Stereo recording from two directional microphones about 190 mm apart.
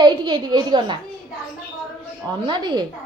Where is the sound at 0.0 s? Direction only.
25° right (ahead or behind).